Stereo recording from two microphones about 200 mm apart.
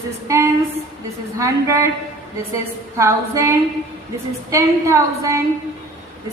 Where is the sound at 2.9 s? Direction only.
15° right (ahead or behind).